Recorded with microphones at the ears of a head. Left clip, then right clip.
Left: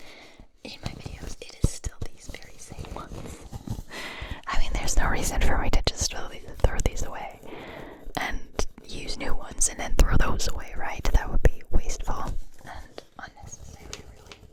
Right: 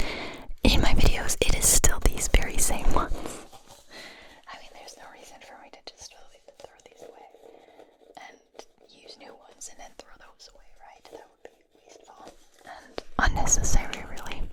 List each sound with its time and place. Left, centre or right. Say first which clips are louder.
0.0 s whispering: right 13 dB; right
3.7 s whispering: left 12 dB; left
13.0 s whispering: right 15 dB; right